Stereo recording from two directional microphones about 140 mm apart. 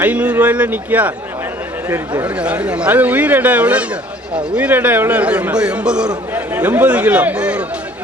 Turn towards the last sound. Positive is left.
turn(degrees=-10)  # may be behind; listen again after turning